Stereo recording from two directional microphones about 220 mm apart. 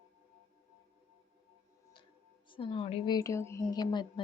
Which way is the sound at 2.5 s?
25° left (ahead or behind).